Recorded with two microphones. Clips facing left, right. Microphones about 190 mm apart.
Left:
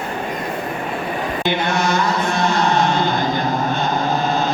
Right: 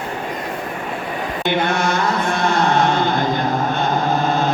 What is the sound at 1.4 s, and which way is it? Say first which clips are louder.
Chant: right 2 dB; 55° right (ahead or behind).